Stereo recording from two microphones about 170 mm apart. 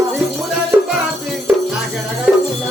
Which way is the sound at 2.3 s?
10° right (ahead or behind).